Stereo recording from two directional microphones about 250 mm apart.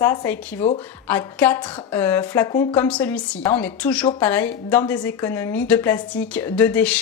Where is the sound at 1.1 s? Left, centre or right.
Centre.